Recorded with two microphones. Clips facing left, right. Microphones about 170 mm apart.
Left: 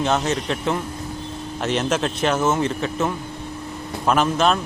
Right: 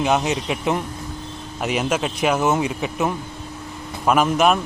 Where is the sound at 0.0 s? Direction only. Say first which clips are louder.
Right 1 dB; 15° right (ahead or behind).